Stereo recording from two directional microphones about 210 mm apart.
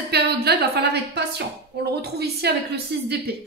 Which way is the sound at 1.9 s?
50° right (ahead or behind).